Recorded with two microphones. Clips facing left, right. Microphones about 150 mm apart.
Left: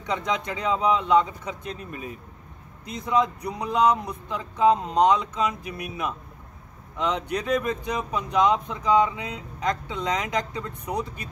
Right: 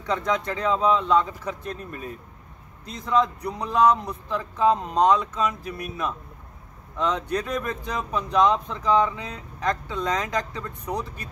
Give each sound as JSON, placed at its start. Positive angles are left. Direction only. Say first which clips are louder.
{"t": 0.0, "sound": "speech", "louder": "right 2 dB", "side_deg": 15}